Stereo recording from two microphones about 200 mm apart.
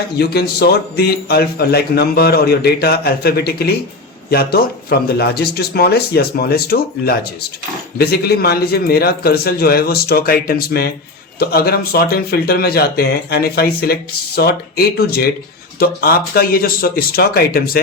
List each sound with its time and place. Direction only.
0.2 s speech: 50° left (ahead or behind)